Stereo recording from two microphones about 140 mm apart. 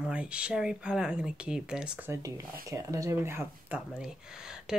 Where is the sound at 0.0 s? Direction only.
10° right (ahead or behind).